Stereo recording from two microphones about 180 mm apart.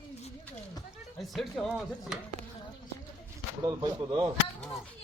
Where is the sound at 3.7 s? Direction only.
25° right (ahead or behind).